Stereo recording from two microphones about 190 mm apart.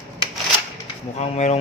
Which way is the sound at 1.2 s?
35° left (ahead or behind).